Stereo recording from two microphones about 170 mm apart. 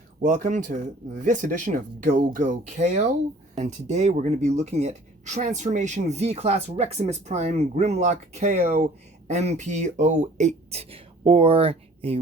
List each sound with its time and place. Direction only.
0.2 s speech: 50° right (ahead or behind); by 12.2 s 35° right (ahead or behind)